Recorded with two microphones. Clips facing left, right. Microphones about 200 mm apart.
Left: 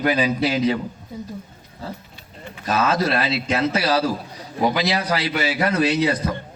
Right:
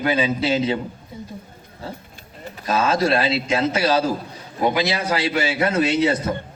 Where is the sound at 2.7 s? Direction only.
25° right (ahead or behind).